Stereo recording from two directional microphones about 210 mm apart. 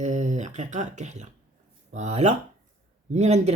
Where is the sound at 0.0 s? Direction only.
35° right (ahead or behind).